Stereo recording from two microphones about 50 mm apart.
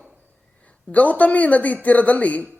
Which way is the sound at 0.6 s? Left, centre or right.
Left.